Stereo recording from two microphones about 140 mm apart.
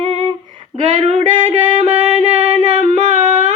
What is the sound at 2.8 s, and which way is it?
Female singing, 55° right (ahead or behind).